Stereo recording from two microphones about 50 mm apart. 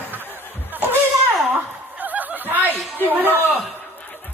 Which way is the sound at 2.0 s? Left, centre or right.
Right.